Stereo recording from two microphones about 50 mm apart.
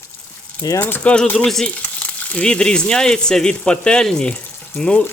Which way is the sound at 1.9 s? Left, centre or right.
Left.